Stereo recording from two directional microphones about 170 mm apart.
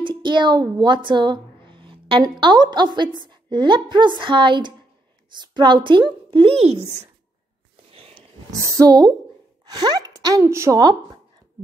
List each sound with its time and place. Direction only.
0.0 s a woman's voice: 25° right (ahead or behind)
7.9 s a sound: 35° right (ahead or behind)
8.5 s a woman's voice: 20° right (ahead or behind)